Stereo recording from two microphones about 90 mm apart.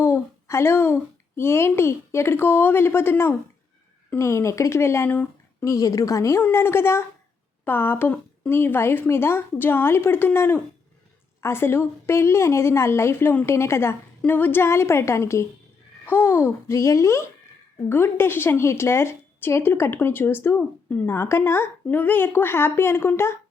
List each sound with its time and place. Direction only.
0.0 s speech: 30° left (ahead or behind)
5.6 s a child's voice: 40° left (ahead or behind); by 21.1 s 20° left (ahead or behind)
21.1 s a woman's voice: 30° left (ahead or behind)